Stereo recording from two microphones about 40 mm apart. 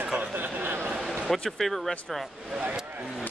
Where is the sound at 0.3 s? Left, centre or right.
Right.